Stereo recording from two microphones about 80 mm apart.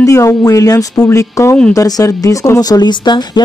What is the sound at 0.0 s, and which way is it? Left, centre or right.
Speech, left.